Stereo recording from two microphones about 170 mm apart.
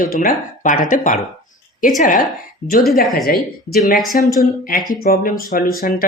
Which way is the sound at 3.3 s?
60° left (ahead or behind).